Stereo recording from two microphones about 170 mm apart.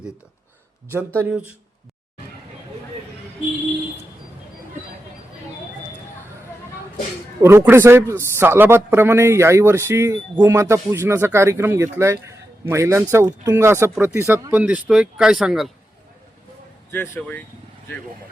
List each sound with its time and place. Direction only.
1.2 s a man's voice: 5° right (ahead or behind)
7.4 s a man's voice: 15° right (ahead or behind)
16.9 s speech: 10° left (ahead or behind)